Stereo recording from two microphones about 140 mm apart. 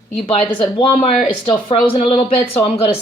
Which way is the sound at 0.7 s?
40° left (ahead or behind).